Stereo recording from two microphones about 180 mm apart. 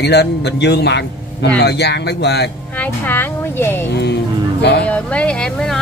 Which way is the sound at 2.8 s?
10° left (ahead or behind).